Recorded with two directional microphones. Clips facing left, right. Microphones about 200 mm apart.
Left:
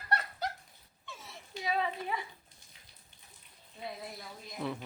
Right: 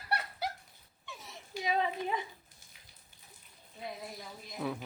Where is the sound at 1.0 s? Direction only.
15° right (ahead or behind).